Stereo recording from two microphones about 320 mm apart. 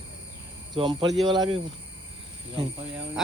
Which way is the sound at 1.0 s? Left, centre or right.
Centre.